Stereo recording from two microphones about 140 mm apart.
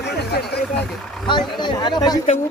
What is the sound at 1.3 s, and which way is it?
Speech, 35° left (ahead or behind).